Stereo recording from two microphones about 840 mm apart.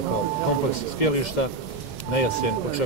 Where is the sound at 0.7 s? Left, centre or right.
Left.